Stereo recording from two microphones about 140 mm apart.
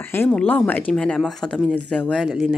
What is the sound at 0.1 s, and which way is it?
Speech, 15° left (ahead or behind).